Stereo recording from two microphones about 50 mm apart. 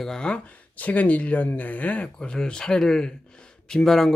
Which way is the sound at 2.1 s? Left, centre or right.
Centre.